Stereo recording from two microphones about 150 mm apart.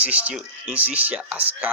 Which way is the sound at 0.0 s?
10° right (ahead or behind).